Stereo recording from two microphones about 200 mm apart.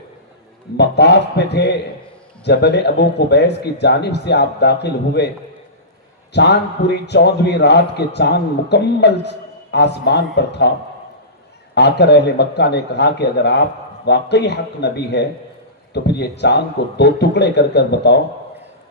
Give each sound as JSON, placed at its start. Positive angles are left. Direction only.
{"t": 0.8, "sound": "a man's voice", "side_deg": 60}
{"t": 6.3, "sound": "a man's voice", "side_deg": 55}
{"t": 11.7, "sound": "a man's voice", "side_deg": 55}